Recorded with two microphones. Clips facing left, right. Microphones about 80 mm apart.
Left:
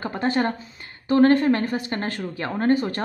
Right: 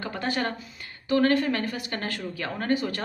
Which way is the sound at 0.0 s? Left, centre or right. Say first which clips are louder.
Left 6 dB; left.